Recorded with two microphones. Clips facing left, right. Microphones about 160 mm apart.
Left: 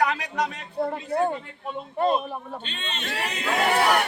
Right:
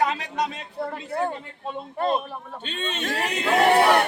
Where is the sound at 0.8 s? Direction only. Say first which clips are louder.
Left 3 dB; 20° left (ahead or behind).